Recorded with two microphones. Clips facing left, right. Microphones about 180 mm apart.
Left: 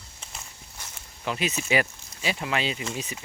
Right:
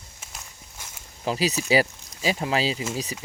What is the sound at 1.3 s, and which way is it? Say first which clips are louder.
Speech: right 4 dB; 35° right (ahead or behind).